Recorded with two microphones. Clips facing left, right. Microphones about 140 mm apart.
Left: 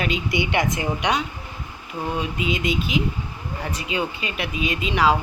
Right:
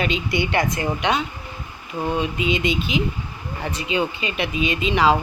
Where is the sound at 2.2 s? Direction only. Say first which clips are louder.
Right 3 dB; 5° left (ahead or behind).